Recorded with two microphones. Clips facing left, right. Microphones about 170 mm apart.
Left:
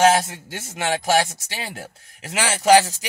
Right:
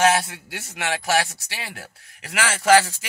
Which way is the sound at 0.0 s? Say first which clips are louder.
Left 3 dB; 25° left (ahead or behind).